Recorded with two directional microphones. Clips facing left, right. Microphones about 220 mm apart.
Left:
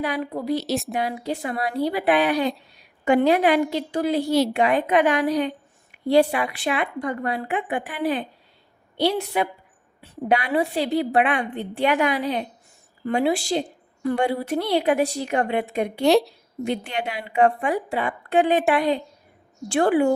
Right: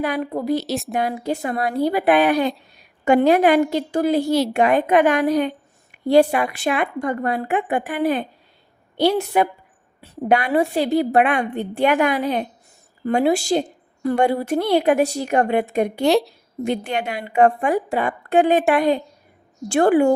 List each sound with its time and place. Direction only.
0.0 s a woman's voice: 50° right (ahead or behind)
0.5 s speech: centre (ahead or behind)
0.9 s a woman's voice: 50° right (ahead or behind)
4.3 s speech: centre (ahead or behind)
4.5 s a woman's voice: 50° right (ahead or behind)
16.0 s speech: centre (ahead or behind)
16.6 s a woman's voice: 45° right (ahead or behind)